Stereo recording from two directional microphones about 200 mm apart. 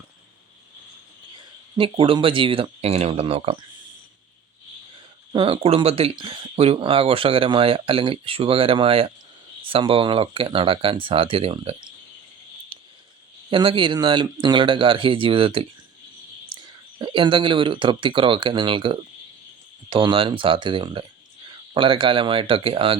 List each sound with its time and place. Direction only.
1.7 s speech: 25° right (ahead or behind)
5.3 s speech: 25° right (ahead or behind)
12.7 s a sound: 25° right (ahead or behind)
13.5 s speech: 25° right (ahead or behind)
16.5 s whispering: 25° right (ahead or behind)
17.0 s speech: 25° right (ahead or behind)